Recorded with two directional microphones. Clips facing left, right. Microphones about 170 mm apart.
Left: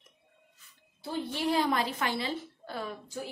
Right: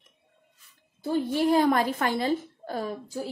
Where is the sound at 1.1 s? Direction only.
45° right (ahead or behind).